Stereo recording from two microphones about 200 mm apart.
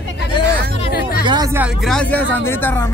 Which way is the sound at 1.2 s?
20° right (ahead or behind).